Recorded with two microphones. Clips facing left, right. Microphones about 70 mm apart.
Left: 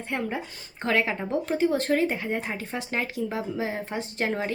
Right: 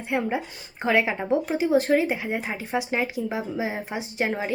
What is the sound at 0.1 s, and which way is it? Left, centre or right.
A woman's voice, centre.